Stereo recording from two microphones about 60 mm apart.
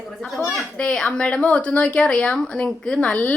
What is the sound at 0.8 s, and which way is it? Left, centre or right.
A woman's voice, centre.